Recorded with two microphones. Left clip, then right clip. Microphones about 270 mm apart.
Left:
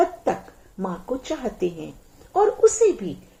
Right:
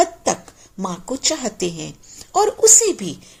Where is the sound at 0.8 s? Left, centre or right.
Right.